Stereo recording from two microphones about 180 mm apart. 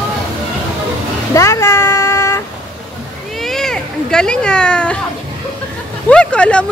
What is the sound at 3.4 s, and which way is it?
Children playing, centre (ahead or behind).